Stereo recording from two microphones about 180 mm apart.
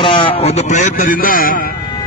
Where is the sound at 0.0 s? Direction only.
30° left (ahead or behind); by 1.7 s 50° left (ahead or behind).